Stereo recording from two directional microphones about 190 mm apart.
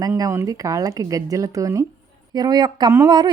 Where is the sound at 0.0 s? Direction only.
15° right (ahead or behind).